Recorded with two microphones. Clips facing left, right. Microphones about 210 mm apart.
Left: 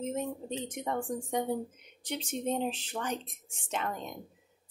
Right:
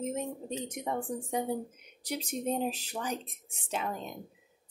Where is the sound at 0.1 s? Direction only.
10° right (ahead or behind).